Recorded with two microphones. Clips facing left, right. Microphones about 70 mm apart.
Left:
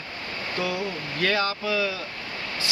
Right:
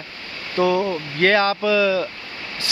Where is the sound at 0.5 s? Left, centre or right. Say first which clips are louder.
Right 11 dB; right.